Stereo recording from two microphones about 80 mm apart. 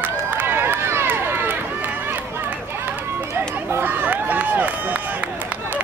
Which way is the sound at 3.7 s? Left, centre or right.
Right.